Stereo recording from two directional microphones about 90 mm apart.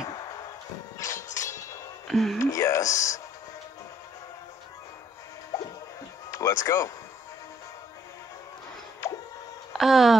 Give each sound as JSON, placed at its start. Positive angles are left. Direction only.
{"t": 0.9, "sound": "a sound", "side_deg": 35}
{"t": 2.0, "sound": "speech", "side_deg": 0}
{"t": 2.3, "sound": "speech", "side_deg": 35}
{"t": 5.5, "sound": "music", "side_deg": 35}
{"t": 6.3, "sound": "speech", "side_deg": 40}
{"t": 9.0, "sound": "a sound", "side_deg": 35}
{"t": 9.7, "sound": "speech", "side_deg": -5}